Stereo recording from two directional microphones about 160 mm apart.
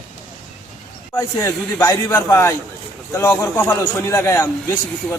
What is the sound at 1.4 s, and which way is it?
A man's voice, 15° left (ahead or behind).